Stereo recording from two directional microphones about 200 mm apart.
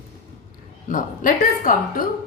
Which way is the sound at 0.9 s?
40° left (ahead or behind).